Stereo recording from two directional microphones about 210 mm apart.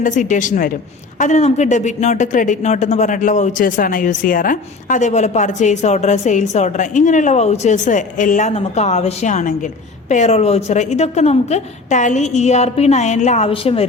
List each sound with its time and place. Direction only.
0.0 s speech: 35° left (ahead or behind)